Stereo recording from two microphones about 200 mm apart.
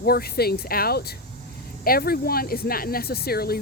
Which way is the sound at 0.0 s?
50° left (ahead or behind).